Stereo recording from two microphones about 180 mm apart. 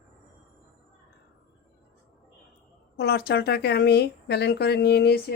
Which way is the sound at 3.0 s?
65° left (ahead or behind).